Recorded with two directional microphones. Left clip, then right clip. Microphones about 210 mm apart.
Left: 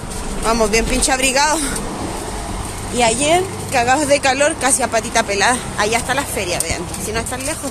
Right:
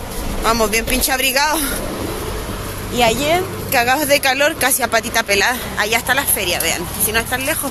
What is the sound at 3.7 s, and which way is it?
Speech, 5° right (ahead or behind).